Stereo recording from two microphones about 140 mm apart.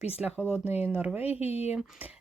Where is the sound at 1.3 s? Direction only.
45° left (ahead or behind).